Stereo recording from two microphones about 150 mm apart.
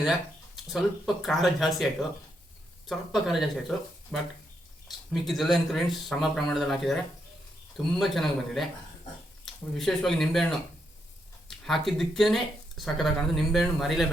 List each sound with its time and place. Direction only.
0.0 s speech: centre (ahead or behind)